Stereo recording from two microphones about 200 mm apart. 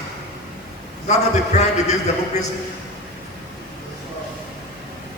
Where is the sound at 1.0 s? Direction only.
35° left (ahead or behind).